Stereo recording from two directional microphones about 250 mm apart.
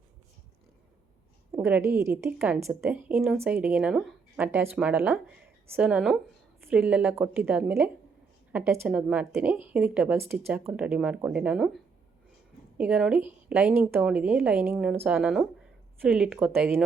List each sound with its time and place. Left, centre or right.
1.5 s a woman's voice: centre